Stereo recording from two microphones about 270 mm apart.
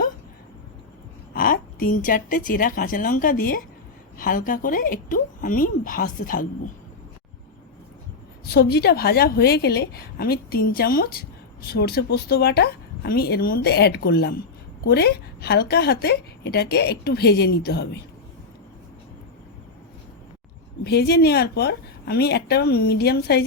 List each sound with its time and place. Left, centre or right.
1.3 s speech: left
8.4 s speech: left
20.8 s speech: left